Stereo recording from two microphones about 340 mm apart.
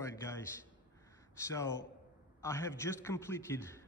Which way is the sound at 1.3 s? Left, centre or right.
Centre.